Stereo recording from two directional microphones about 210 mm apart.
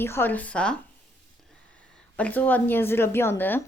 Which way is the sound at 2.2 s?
5° left (ahead or behind).